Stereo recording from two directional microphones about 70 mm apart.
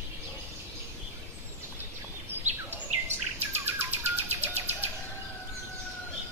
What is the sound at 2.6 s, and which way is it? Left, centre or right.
Bird, right.